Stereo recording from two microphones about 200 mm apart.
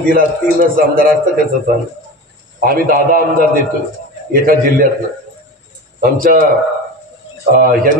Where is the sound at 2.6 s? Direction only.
45° right (ahead or behind).